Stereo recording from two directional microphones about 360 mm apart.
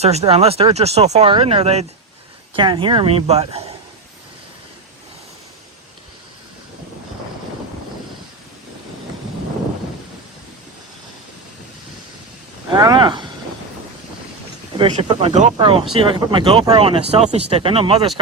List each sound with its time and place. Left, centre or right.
0.0 s speech: centre
12.7 s speech: centre
14.8 s speech: centre